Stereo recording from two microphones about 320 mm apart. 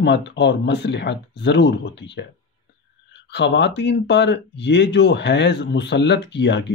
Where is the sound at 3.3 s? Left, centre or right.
Left.